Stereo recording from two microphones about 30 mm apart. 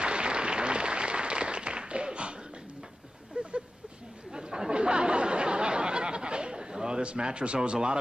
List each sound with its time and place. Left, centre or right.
0.0 s applause: right
3.4 s a sound: right
4.3 s chatter: right